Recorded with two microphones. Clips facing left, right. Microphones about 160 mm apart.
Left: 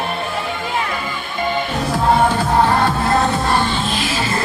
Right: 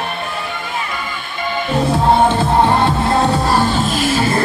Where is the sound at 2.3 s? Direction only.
25° right (ahead or behind).